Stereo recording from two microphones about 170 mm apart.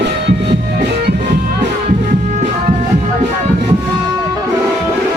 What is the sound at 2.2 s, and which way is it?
Music, 40° right (ahead or behind).